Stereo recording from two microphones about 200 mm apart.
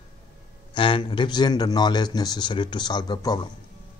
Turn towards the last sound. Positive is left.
turn(degrees=20)  # may be behind; listen again after turning